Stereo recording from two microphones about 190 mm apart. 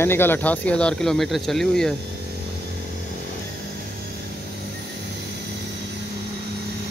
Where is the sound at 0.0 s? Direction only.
10° left (ahead or behind).